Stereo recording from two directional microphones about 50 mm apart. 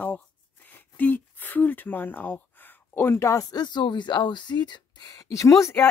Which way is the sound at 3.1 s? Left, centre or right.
Left.